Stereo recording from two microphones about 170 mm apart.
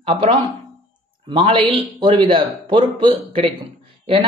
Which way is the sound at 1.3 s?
30° right (ahead or behind).